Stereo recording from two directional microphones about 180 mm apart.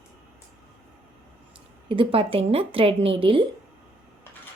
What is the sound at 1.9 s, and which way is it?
Speech, 30° right (ahead or behind).